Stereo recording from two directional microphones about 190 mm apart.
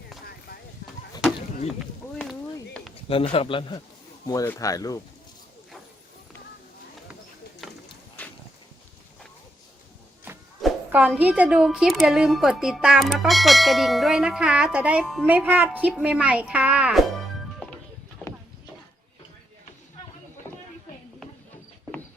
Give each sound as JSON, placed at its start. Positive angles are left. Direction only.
{"t": 3.1, "sound": "speech", "side_deg": 30}
{"t": 4.3, "sound": "speech", "side_deg": 15}
{"t": 7.6, "sound": "clip-clop", "side_deg": 0}
{"t": 8.2, "sound": "a sound", "side_deg": 10}
{"t": 10.8, "sound": "a woman's voice", "side_deg": -10}